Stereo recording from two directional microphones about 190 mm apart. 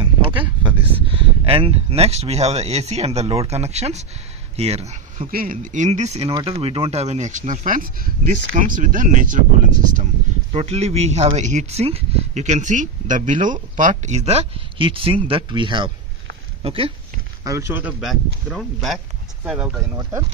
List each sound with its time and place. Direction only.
0.0 s speech: 25° right (ahead or behind)
5.3 s speech: 45° right (ahead or behind)
10.5 s speech: 30° right (ahead or behind)
17.4 s speech: 15° right (ahead or behind)
18.5 s speech: centre (ahead or behind)
20.0 s speech: 15° right (ahead or behind)